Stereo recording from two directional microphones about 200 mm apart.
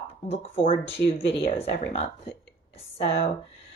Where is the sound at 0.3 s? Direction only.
30° left (ahead or behind).